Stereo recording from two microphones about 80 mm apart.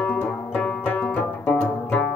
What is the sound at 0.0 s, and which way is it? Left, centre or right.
Music, centre.